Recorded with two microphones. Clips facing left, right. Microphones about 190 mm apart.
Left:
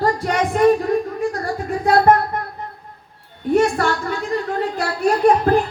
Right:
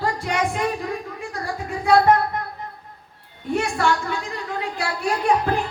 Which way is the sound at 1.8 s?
45° left (ahead or behind).